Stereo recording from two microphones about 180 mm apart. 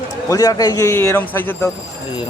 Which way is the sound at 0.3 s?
20° left (ahead or behind).